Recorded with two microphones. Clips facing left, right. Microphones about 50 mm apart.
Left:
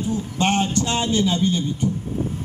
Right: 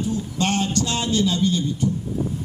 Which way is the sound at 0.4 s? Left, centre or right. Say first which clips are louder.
Left 2 dB; left.